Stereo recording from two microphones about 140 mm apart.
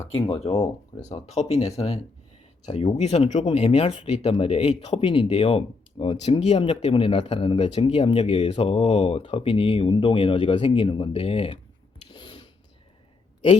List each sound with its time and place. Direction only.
0.2 s speech: 45° left (ahead or behind)